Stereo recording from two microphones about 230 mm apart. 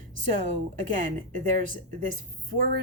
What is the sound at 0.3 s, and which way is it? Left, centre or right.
Speech, right.